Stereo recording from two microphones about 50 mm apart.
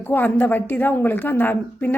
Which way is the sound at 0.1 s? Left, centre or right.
Left.